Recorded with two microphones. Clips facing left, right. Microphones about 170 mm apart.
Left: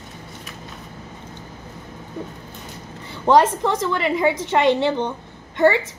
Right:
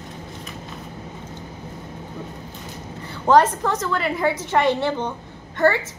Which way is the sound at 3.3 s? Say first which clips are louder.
Left 1 dB; 15° left (ahead or behind).